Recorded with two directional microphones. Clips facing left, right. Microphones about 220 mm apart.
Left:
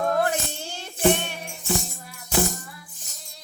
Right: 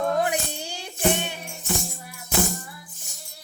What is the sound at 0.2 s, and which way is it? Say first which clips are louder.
Music: even; 15° right (ahead or behind).